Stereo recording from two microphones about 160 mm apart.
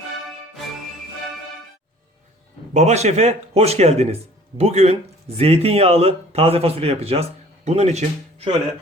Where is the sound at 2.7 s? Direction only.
45° right (ahead or behind).